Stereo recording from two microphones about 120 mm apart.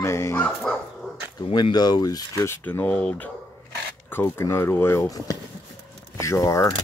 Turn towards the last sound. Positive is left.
turn(degrees=25)  # may be behind; listen again after turning